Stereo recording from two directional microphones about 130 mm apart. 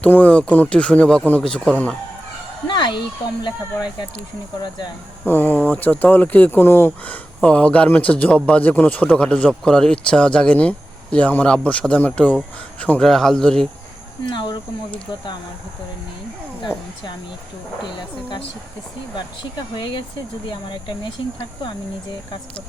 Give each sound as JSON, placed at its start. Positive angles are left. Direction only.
{"t": 0.0, "sound": "a man's voice", "side_deg": 10}
{"t": 2.6, "sound": "a sound", "side_deg": 35}
{"t": 5.2, "sound": "a man's voice", "side_deg": 15}
{"t": 14.3, "sound": "speech", "side_deg": 35}
{"t": 19.7, "sound": "speech", "side_deg": 40}